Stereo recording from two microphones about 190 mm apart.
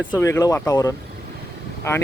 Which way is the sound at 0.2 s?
15° left (ahead or behind).